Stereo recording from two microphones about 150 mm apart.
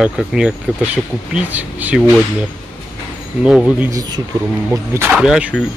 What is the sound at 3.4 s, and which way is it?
Speech, 5° right (ahead or behind).